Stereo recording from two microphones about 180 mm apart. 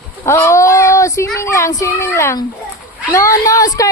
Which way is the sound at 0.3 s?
15° left (ahead or behind).